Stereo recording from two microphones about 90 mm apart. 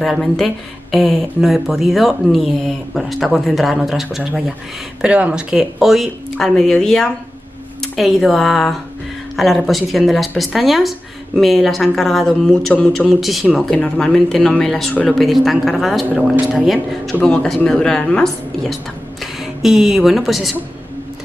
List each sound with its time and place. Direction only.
0.0 s speech: centre (ahead or behind)
19.4 s speech: 5° right (ahead or behind)